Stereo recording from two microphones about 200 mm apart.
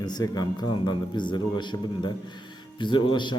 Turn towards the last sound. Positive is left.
turn(degrees=20)  # may be behind; listen again after turning